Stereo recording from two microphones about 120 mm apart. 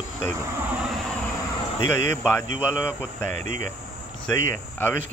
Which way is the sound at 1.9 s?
25° left (ahead or behind).